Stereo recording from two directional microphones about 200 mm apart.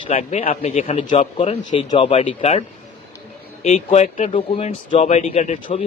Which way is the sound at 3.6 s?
35° left (ahead or behind).